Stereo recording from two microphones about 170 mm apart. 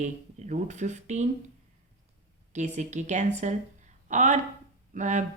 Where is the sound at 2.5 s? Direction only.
45° right (ahead or behind).